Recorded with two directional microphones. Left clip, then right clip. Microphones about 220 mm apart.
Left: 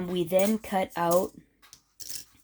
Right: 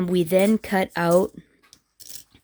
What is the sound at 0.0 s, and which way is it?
Speech, 45° right (ahead or behind).